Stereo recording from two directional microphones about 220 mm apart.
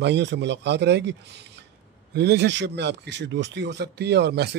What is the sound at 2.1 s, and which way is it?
A man's voice, 50° right (ahead or behind).